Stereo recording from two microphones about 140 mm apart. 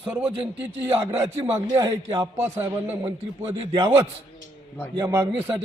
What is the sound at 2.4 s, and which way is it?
Speech, 15° right (ahead or behind).